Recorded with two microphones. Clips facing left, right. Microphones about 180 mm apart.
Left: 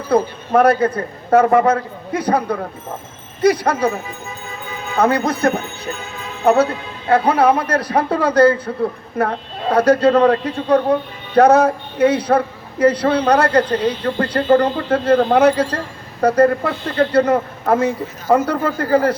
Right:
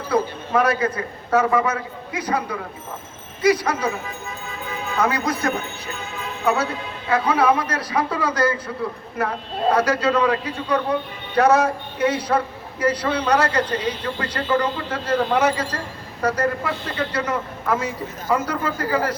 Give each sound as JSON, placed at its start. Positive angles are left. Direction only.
{"t": 0.1, "sound": "speech", "side_deg": 55}
{"t": 4.9, "sound": "speech", "side_deg": 60}